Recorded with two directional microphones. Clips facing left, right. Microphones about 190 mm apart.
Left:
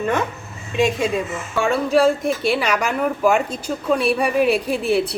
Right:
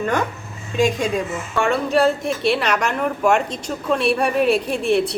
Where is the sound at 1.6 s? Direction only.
Centre (ahead or behind).